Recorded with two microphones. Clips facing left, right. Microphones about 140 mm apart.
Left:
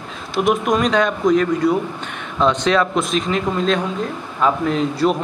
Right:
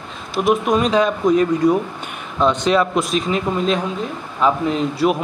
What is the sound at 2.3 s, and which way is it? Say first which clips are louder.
Speech: even; 5° right (ahead or behind).